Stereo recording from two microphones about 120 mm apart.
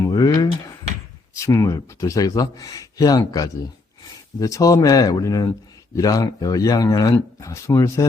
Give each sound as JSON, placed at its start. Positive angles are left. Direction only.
{"t": 0.0, "sound": "speech", "side_deg": 30}